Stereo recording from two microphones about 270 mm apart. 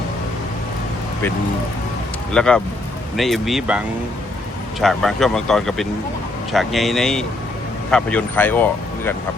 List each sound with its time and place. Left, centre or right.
2.3 s speech: centre